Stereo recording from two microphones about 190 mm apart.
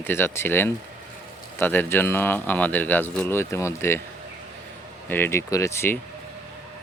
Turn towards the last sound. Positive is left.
turn(degrees=10)  # may be behind; listen again after turning